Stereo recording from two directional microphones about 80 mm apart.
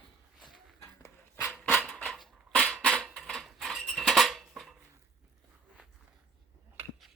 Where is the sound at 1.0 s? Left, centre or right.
Left.